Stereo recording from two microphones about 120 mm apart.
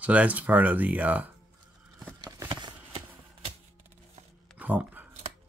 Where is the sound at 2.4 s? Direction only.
40° right (ahead or behind).